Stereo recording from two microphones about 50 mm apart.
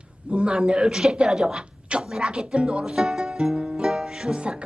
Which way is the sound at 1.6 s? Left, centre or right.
Right.